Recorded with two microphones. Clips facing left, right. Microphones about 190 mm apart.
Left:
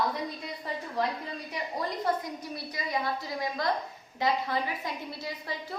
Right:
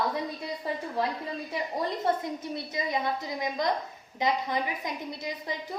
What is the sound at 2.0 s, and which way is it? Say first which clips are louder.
A woman's voice: right 2 dB; 25° right (ahead or behind).